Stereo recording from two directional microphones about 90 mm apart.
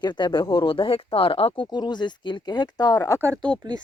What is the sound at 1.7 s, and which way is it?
Speech, 55° left (ahead or behind).